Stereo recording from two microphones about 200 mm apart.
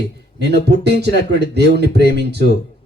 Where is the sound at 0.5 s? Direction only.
55° right (ahead or behind).